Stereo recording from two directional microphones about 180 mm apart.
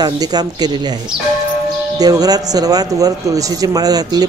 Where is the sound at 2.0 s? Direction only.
20° right (ahead or behind).